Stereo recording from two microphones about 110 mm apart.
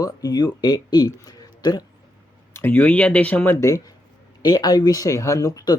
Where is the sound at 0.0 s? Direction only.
35° left (ahead or behind).